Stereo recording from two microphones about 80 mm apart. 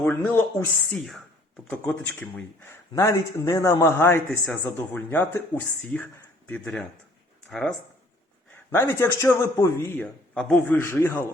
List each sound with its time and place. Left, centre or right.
0.0 s speech: left
0.9 s speech: centre
1.9 s speech: centre
2.9 s a man's voice: left
7.5 s speech: centre
8.7 s a man's voice: left
10.3 s a man's voice: centre
10.7 s a man's voice: left